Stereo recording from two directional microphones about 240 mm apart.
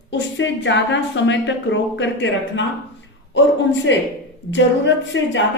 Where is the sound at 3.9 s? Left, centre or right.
Left.